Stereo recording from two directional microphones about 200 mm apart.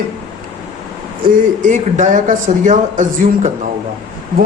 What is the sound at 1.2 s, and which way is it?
A man's voice, 40° right (ahead or behind).